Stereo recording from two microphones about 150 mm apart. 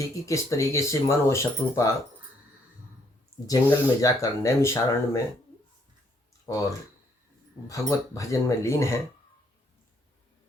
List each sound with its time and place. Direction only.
0.3 s speech: 20° left (ahead or behind)
3.4 s speech: 20° left (ahead or behind)
6.4 s speech: 25° left (ahead or behind)